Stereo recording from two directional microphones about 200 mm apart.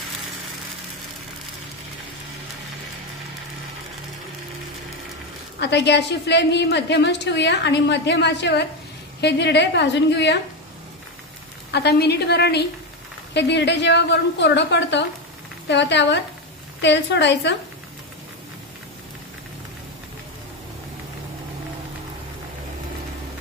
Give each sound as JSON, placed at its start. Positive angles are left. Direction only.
{"t": 5.6, "sound": "a woman's voice", "side_deg": 60}
{"t": 11.7, "sound": "a woman's voice", "side_deg": 55}